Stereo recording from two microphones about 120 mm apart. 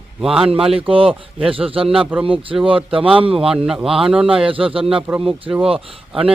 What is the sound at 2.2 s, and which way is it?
Speech, 50° right (ahead or behind).